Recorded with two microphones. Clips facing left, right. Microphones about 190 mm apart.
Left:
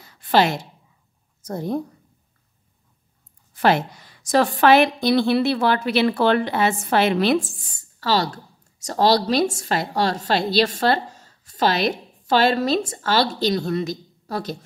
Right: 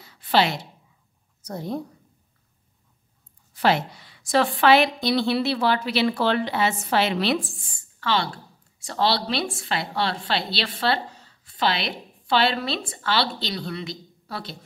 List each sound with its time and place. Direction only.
0.0 s a sound: 50° left (ahead or behind)
1.4 s a woman's voice: 50° left (ahead or behind)
3.5 s a woman's voice: 50° left (ahead or behind)